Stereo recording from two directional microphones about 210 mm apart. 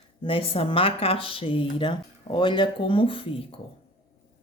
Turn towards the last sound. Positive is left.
turn(degrees=25)  # may be behind; listen again after turning